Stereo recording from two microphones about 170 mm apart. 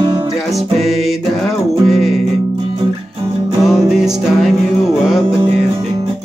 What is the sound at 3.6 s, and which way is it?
Music, centre (ahead or behind).